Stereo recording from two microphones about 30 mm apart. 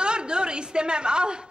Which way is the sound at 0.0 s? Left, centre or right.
Right.